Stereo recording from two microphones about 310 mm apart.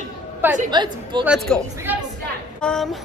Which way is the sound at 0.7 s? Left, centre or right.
Centre.